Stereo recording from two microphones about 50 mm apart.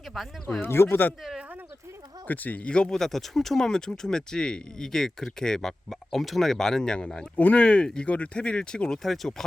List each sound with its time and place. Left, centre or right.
0.1 s speech: centre
0.6 s speech: left
2.2 s speech: left
2.9 s speech: centre
9.0 s speech: centre